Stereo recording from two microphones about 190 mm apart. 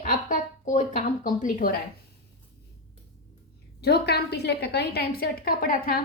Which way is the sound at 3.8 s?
60° left (ahead or behind).